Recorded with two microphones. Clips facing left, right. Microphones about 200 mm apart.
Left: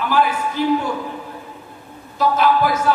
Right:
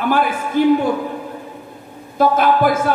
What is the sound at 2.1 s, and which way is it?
Speech, 50° right (ahead or behind).